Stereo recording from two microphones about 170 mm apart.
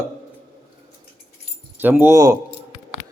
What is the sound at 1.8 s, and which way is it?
Speech, 10° right (ahead or behind).